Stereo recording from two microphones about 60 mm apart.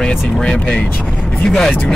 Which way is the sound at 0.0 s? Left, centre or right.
Centre.